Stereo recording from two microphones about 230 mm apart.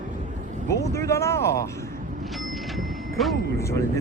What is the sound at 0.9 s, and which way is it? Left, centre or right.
Speech, centre.